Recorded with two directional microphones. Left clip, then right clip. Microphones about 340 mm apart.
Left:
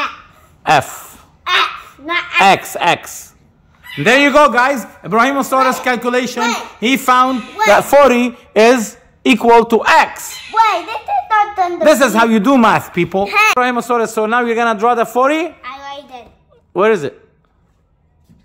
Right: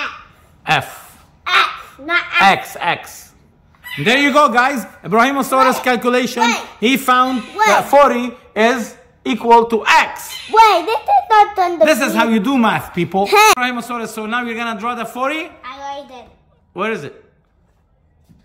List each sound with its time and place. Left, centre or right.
0.7 s a sound: centre
2.4 s a man's voice: left
4.0 s a man's voice: centre
7.9 s a man's voice: left
10.5 s a child's voice: right
11.8 s a man's voice: centre
13.2 s a child's voice: right
13.6 s a man's voice: centre
16.7 s a man's voice: centre